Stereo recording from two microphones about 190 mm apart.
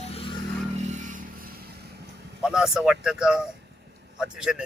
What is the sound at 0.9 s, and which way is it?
Vehicle, 40° right (ahead or behind).